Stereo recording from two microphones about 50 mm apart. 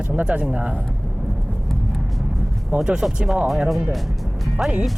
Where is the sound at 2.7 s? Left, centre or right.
Right.